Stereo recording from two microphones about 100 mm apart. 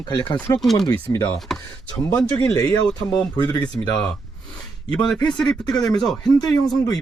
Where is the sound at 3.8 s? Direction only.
40° left (ahead or behind).